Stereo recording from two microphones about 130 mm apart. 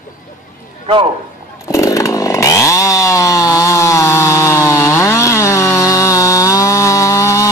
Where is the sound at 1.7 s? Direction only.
25° left (ahead or behind).